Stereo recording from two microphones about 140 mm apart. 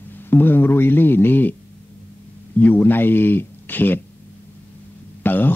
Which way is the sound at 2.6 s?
15° left (ahead or behind).